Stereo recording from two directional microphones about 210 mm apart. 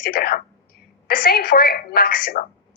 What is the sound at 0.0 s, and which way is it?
A woman's voice, 45° left (ahead or behind).